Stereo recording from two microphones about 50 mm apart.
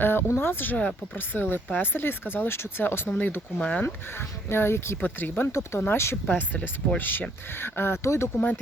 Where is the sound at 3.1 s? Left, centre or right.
Left.